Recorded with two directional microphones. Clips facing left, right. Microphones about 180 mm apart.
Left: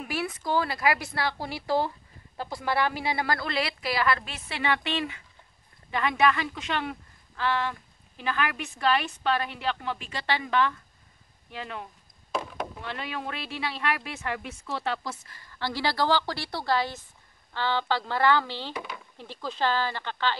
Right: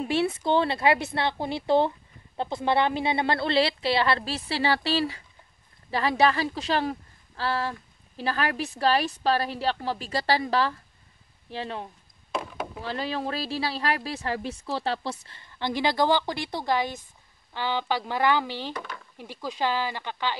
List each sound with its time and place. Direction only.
0.0 s a woman's voice: 25° right (ahead or behind)
12.3 s a sound: centre (ahead or behind)
12.8 s a woman's voice: 35° right (ahead or behind); by 18.7 s 15° right (ahead or behind)
18.7 s speech: 10° left (ahead or behind)
19.1 s speech: 10° right (ahead or behind)